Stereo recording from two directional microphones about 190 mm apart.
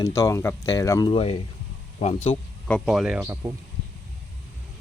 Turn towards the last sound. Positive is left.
turn(degrees=-10)  # may be behind; listen again after turning